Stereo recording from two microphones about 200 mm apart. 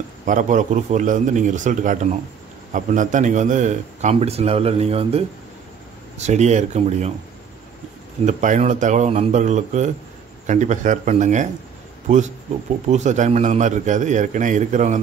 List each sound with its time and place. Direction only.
0.3 s a man's voice: 40° right (ahead or behind)
8.3 s a man's voice: 35° right (ahead or behind)
12.9 s a man's voice: 35° right (ahead or behind)